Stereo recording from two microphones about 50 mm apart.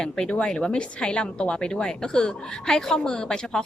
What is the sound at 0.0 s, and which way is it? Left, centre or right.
A woman's voice, centre.